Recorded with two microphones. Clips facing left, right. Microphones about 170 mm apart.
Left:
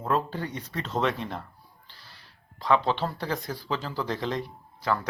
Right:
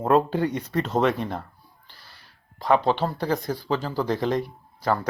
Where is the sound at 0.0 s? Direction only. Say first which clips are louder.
Right 8 dB; 55° right (ahead or behind).